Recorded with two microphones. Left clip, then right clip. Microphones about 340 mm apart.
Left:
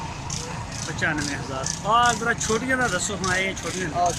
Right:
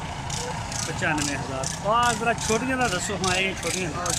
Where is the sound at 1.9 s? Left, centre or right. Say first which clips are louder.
Left 2 dB; centre.